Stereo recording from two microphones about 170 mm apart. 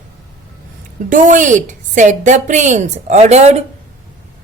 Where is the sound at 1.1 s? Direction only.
50° right (ahead or behind).